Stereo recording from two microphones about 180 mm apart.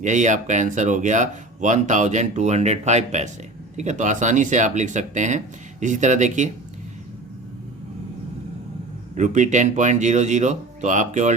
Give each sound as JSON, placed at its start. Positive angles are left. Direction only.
{"t": 0.0, "sound": "speech", "side_deg": -45}
{"t": 9.1, "sound": "speech", "side_deg": -45}